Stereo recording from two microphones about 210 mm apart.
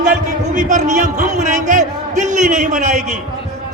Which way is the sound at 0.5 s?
35° right (ahead or behind).